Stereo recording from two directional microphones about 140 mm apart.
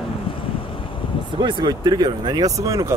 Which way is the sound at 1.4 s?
35° right (ahead or behind).